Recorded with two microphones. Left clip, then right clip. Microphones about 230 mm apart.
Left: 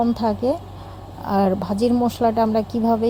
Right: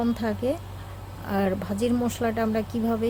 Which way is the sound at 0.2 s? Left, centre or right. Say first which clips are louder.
Left 8 dB; centre.